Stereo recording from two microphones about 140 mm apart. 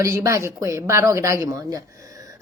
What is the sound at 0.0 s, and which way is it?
Speech, 20° right (ahead or behind).